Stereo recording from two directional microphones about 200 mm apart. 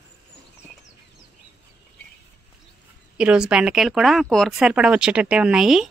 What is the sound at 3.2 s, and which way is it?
Speech, 5° right (ahead or behind).